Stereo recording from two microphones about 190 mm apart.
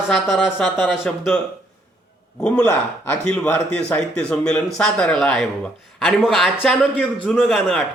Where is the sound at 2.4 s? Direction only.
5° left (ahead or behind).